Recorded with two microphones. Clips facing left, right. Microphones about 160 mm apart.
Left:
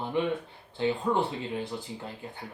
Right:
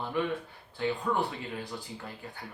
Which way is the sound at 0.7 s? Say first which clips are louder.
Left 3 dB; 25° left (ahead or behind).